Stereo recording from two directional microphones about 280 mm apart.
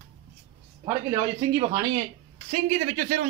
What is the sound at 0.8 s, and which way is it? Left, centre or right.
Speech, centre.